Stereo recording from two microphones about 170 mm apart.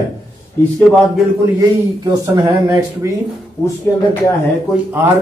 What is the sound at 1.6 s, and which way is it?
A man's voice, 20° right (ahead or behind).